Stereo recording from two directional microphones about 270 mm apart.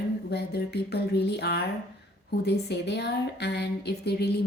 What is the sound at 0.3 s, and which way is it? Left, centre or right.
Speech, left.